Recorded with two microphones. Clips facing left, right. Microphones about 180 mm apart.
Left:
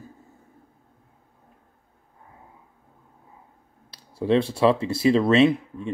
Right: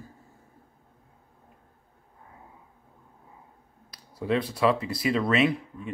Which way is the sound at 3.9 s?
25° left (ahead or behind).